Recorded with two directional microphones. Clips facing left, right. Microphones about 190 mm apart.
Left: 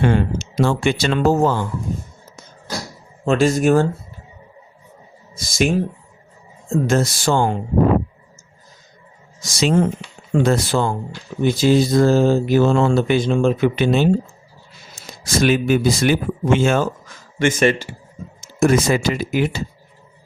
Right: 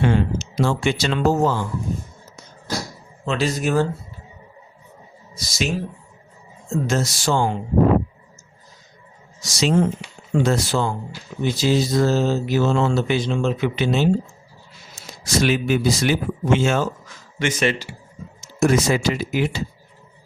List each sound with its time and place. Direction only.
0.0 s mantra: 55° left (ahead or behind)
3.2 s mantra: 50° left (ahead or behind)
5.3 s speech: 50° left (ahead or behind)
6.7 s mantra: 55° left (ahead or behind)
9.4 s mantra: 50° left (ahead or behind)